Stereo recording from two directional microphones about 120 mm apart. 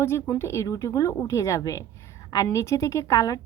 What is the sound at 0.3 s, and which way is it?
A woman's voice, 25° left (ahead or behind).